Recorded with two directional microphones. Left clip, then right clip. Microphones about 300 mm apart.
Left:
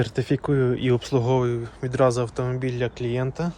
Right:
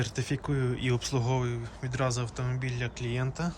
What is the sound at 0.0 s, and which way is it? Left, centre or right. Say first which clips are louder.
Speech: left 9 dB; centre.